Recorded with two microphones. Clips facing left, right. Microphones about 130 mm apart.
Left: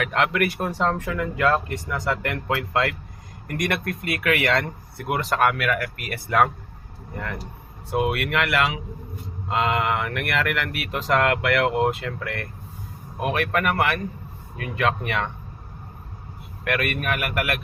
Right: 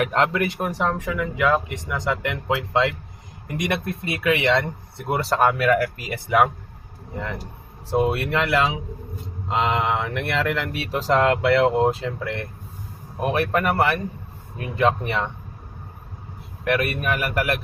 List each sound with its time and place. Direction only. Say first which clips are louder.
0.0 s speech: right 3 dB; 40° right (ahead or behind)
0.3 s speech: even; 20° right (ahead or behind)
6.1 s speech: even; 15° right (ahead or behind)
7.9 s speech: right 2 dB; 30° right (ahead or behind)
16.8 s speech: right 2 dB; 30° right (ahead or behind)